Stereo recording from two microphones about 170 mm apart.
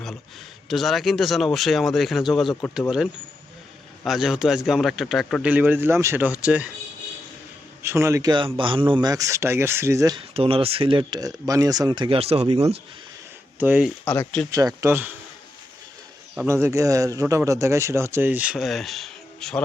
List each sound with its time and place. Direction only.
0.7 s speech: centre (ahead or behind)
4.0 s speech: centre (ahead or behind)
7.8 s a man's voice: 15° right (ahead or behind)
10.2 s speech: 35° right (ahead or behind)
13.6 s a man's voice: 10° right (ahead or behind)
14.0 s speech: 20° left (ahead or behind)
14.8 s a man's voice: 15° right (ahead or behind)
16.5 s a man's voice: 15° right (ahead or behind); by 19.6 s 5° left (ahead or behind)